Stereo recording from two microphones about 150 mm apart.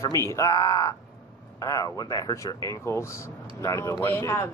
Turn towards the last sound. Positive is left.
turn(degrees=15)  # may be behind; listen again after turning